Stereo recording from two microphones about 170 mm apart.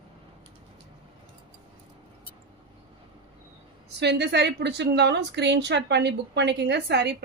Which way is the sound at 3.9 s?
80° right.